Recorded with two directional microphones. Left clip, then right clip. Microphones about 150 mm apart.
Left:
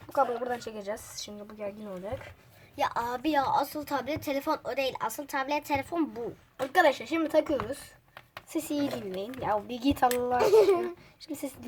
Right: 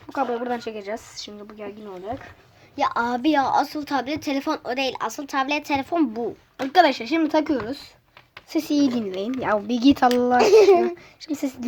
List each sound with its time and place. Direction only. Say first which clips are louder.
0.8 s a woman's voice: right 5 dB; 30° right (ahead or behind)
2.7 s a woman's voice: right 7 dB; 30° right (ahead or behind)
8.4 s a child's voice: right 9 dB; 45° right (ahead or behind)